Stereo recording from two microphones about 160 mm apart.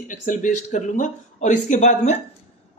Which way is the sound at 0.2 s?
50° left (ahead or behind).